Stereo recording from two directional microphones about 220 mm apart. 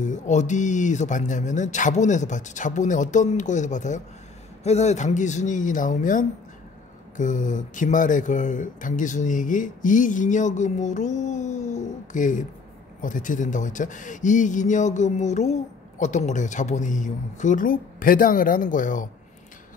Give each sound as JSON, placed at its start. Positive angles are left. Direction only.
{"t": 0.0, "sound": "speech", "side_deg": 35}